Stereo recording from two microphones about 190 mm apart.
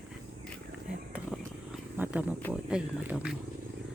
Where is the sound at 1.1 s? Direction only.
5° right (ahead or behind).